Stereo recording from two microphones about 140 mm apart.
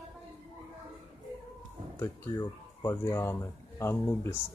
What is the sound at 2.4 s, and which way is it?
Speech, 20° left (ahead or behind).